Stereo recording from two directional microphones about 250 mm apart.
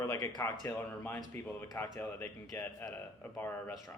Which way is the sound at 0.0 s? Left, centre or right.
Centre.